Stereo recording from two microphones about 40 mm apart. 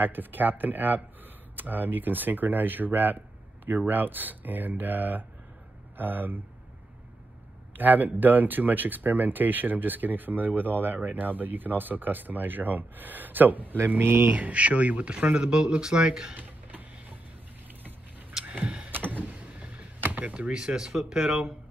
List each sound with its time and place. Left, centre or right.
0.0 s speech: right
7.7 s speech: right
13.7 s speech: right
14.3 s speech: right
15.4 s speech: centre
18.4 s a sound: right
18.9 s vehicle: right
20.0 s a sound: right
20.3 s speech: right